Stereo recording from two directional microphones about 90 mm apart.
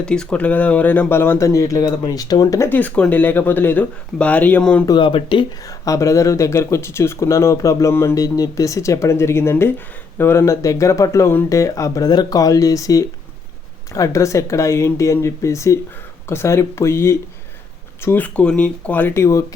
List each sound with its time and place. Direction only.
0.0 s speech: 10° left (ahead or behind)
1.5 s speech: 35° left (ahead or behind)
2.6 s speech: 20° left (ahead or behind)
4.9 s speech: 70° left (ahead or behind)
5.6 s speech: 40° left (ahead or behind); by 18.3 s 25° left (ahead or behind)
18.3 s speech: 15° left (ahead or behind)
19.1 s speech: 35° left (ahead or behind)